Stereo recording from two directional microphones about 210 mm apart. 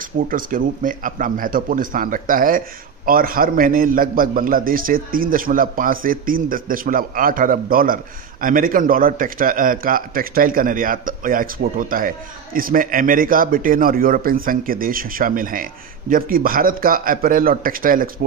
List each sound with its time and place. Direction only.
0.0 s a man's voice: 40° right (ahead or behind)